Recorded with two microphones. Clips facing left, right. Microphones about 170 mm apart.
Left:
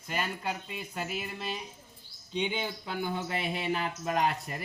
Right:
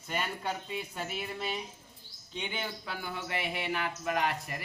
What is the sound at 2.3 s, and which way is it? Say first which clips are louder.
Speech: left 5 dB; 20° left (ahead or behind).